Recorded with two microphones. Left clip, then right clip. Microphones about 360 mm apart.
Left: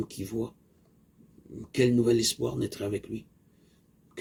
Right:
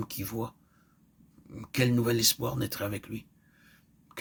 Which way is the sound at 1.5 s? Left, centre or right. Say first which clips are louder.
Left 4 dB; right.